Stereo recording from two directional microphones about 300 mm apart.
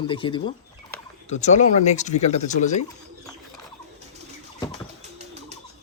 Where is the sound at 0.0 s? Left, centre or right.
Centre.